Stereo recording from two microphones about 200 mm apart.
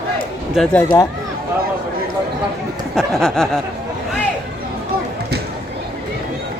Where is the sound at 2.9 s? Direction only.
Centre (ahead or behind).